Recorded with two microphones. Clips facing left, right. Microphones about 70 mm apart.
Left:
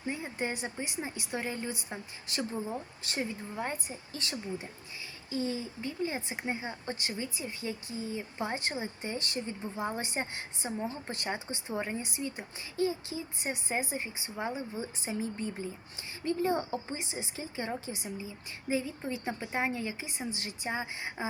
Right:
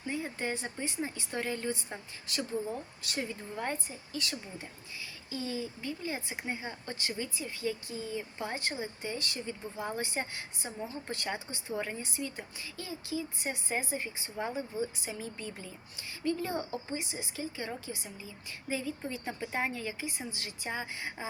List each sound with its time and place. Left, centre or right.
0.1 s speech: centre
3.5 s speech: centre
4.1 s speech: left